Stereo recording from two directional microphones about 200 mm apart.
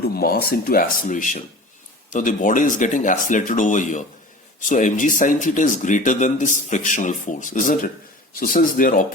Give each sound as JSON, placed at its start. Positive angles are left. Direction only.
{"t": 0.0, "sound": "speech", "side_deg": 50}